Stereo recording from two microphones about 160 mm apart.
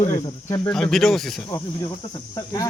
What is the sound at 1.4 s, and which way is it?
Cricket, 25° left (ahead or behind).